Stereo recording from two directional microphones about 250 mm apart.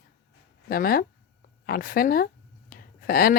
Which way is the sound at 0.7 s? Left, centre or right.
Left.